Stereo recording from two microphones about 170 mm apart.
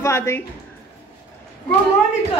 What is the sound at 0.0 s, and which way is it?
Speech, 15° left (ahead or behind).